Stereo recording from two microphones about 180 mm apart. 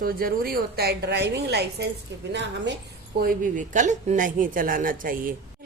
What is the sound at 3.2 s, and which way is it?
A woman's voice, 50° right (ahead or behind).